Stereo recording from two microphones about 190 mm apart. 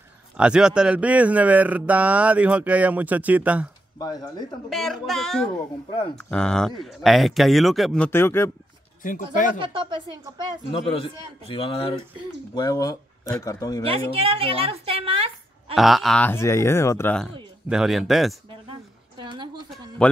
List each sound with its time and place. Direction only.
0.4 s speech: 5° right (ahead or behind)
4.0 s a man's voice: 20° left (ahead or behind)
4.6 s speech: centre (ahead or behind)
9.0 s speech: 45° left (ahead or behind)
9.6 s a woman's voice: 25° right (ahead or behind)
10.7 s a man's voice: 30° left (ahead or behind)
12.5 s speech: 20° left (ahead or behind)
14.1 s a woman's voice: 30° right (ahead or behind)
15.7 s speech: centre (ahead or behind)
17.6 s speech: centre (ahead or behind)
18.7 s a sound: 25° right (ahead or behind)
20.0 s speech: 5° left (ahead or behind)